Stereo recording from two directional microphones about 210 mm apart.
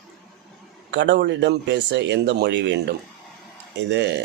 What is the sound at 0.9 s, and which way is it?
Speech, 60° right (ahead or behind).